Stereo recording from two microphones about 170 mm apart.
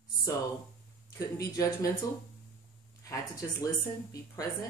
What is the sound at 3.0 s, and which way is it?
Speech, 20° left (ahead or behind).